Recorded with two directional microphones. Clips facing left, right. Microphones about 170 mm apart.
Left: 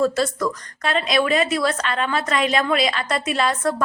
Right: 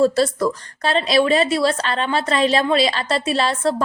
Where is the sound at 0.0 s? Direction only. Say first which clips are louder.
Right 4 dB; 30° right (ahead or behind).